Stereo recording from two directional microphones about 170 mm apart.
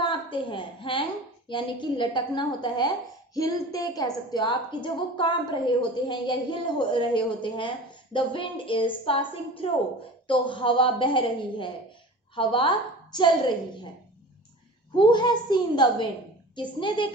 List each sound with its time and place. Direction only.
0.0 s a woman's voice: 30° left (ahead or behind)
14.9 s a woman's voice: 25° left (ahead or behind)